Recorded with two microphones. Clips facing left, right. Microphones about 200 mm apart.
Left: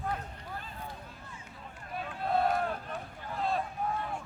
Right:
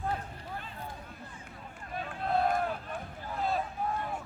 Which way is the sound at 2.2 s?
Centre (ahead or behind).